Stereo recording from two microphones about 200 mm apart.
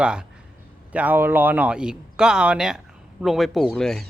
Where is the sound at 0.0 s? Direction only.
5° right (ahead or behind).